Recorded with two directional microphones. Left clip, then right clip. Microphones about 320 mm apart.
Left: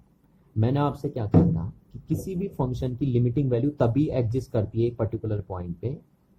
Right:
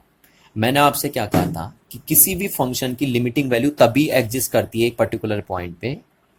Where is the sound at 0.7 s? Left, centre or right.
Right.